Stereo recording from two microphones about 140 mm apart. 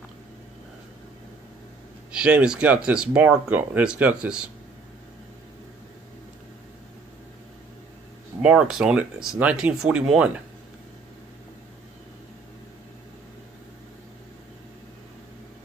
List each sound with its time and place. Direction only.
2.1 s speech: 5° right (ahead or behind)
8.4 s speech: 5° right (ahead or behind)